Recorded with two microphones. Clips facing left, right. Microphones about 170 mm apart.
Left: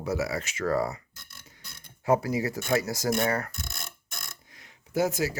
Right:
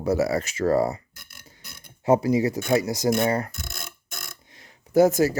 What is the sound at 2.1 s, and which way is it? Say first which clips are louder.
Speech: right 5 dB; 20° right (ahead or behind).